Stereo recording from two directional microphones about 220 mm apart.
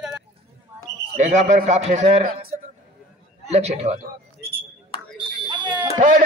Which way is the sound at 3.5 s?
30° right (ahead or behind).